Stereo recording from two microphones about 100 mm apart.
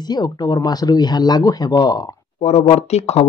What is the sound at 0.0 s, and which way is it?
Speech, 45° left (ahead or behind).